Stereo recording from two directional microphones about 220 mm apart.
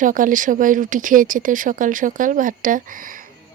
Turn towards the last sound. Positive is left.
turn(degrees=-40)  # may be behind; listen again after turning